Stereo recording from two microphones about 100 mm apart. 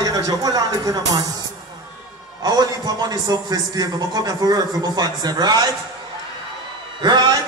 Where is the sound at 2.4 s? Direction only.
45° right (ahead or behind).